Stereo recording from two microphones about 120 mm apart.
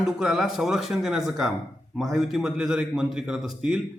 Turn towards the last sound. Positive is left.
turn(degrees=-5)  # may be behind; listen again after turning